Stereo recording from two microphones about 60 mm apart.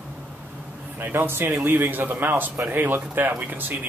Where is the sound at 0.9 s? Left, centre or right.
Right.